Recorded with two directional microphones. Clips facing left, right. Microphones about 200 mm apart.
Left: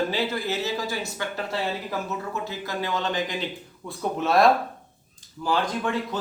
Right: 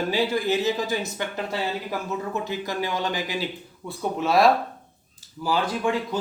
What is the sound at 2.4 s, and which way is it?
Speech, 15° right (ahead or behind).